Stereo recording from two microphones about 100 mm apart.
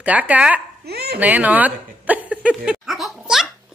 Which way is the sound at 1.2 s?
15° right (ahead or behind).